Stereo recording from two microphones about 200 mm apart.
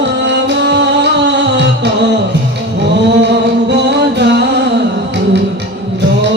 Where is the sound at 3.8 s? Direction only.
60° right (ahead or behind).